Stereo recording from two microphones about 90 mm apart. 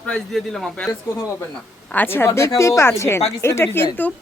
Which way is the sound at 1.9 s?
20° left (ahead or behind).